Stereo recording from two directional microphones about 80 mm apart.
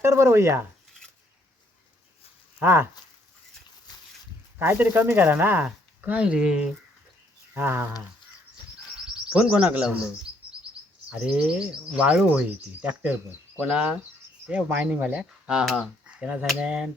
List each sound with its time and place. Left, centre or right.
0.0 s speech: right
2.6 s speech: right
4.5 s speech: right; by 6.7 s centre
7.5 s speech: right
9.3 s speech: centre
14.9 s speech: centre